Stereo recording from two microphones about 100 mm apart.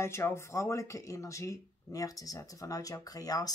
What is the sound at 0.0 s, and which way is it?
Speech, 25° left (ahead or behind).